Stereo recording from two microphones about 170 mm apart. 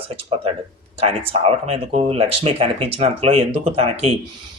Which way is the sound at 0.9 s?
35° right (ahead or behind).